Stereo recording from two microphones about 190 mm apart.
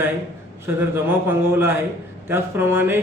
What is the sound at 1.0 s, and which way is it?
Speech, 10° right (ahead or behind).